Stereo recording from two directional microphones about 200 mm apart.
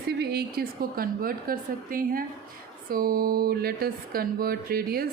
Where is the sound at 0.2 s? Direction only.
55° right (ahead or behind).